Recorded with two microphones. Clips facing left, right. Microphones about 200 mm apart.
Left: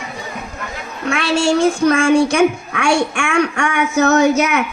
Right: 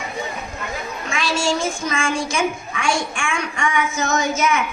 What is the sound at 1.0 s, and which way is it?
A woman's voice, 65° left (ahead or behind).